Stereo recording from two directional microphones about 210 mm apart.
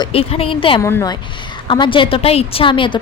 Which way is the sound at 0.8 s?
15° left (ahead or behind).